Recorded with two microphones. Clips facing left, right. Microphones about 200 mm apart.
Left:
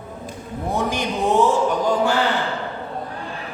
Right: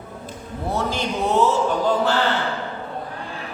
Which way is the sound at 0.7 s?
15° left (ahead or behind).